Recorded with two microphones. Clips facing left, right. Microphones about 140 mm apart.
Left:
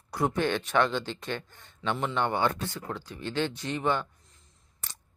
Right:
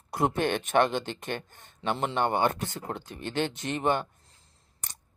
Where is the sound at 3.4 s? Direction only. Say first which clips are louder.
Right 1 dB; 20° right (ahead or behind).